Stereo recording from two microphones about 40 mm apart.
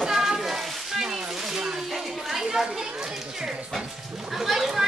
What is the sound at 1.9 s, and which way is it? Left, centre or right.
Speech, centre.